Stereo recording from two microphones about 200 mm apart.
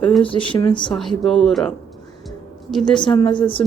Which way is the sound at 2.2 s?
Centre (ahead or behind).